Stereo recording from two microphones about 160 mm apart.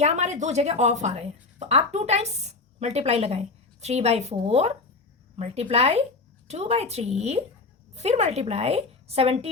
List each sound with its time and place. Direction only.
0.0 s a woman's voice: 45° right (ahead or behind)